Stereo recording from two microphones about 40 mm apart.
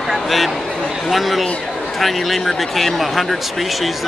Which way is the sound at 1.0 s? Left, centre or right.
Centre.